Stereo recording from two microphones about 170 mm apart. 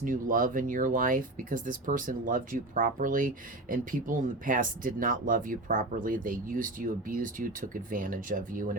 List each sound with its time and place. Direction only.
0.0 s speech: 50° right (ahead or behind)